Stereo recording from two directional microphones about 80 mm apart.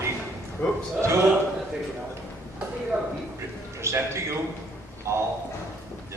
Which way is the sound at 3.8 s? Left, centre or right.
Right.